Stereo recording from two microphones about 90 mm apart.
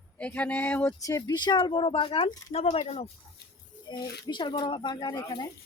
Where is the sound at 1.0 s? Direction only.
40° left (ahead or behind); by 2.3 s 80° left.